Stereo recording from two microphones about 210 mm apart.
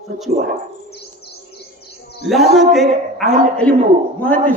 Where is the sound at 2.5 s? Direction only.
Centre (ahead or behind).